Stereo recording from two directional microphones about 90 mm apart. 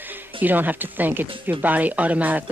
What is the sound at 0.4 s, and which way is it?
Speech, 20° right (ahead or behind).